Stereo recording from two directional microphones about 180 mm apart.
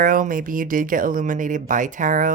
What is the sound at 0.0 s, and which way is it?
Speech, 50° right (ahead or behind).